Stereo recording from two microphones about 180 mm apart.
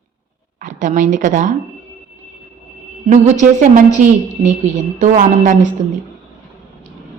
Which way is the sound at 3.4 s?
45° right (ahead or behind).